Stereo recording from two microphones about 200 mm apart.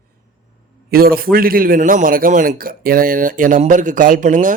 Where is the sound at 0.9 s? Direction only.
50° right (ahead or behind).